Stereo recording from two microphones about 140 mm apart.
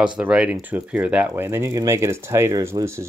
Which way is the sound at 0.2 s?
10° right (ahead or behind).